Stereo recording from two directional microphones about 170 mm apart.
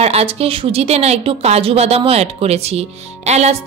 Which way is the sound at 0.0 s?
35° right (ahead or behind).